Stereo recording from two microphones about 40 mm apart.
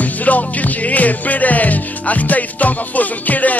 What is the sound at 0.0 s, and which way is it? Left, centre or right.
Music, left.